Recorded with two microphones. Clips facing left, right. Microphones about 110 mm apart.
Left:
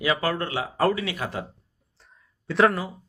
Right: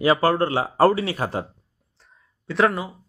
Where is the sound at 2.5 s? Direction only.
Centre (ahead or behind).